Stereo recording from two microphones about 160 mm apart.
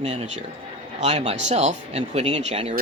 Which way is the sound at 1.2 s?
40° right (ahead or behind).